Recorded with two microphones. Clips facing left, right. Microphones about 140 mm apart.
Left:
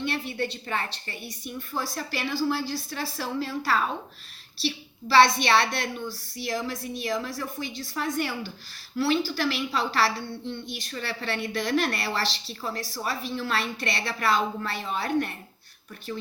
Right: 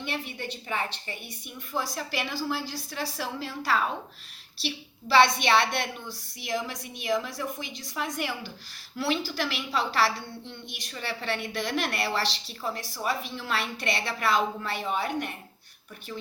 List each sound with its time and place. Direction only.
0.0 s a woman's voice: 15° right (ahead or behind)